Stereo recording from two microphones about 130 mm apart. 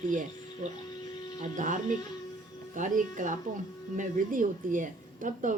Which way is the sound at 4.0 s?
90° right.